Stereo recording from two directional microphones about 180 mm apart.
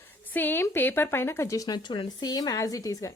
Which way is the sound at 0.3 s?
10° left (ahead or behind).